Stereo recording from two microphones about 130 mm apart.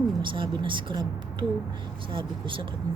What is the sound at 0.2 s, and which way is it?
Speech, 40° right (ahead or behind).